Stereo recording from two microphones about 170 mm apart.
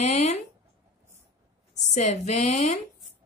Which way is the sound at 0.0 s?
40° left (ahead or behind).